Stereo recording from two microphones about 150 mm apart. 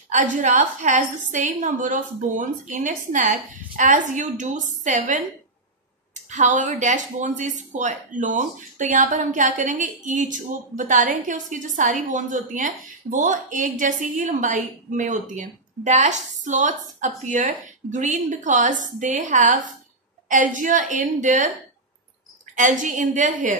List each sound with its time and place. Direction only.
0.1 s a woman's voice: 55° right (ahead or behind)
6.2 s a woman's voice: 55° right (ahead or behind)
22.6 s a woman's voice: 55° right (ahead or behind)